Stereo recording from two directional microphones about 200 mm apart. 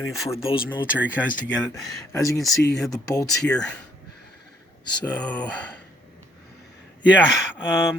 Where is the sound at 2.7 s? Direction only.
Centre (ahead or behind).